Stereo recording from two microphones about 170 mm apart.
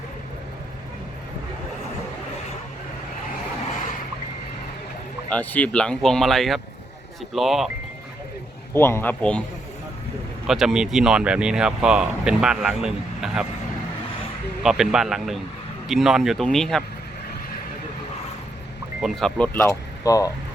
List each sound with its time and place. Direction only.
5.3 s speech: 10° left (ahead or behind)
8.7 s speech: 15° left (ahead or behind)
10.4 s speech: centre (ahead or behind)
14.6 s speech: 5° right (ahead or behind)
19.0 s speech: centre (ahead or behind)
19.5 s speech: 15° left (ahead or behind)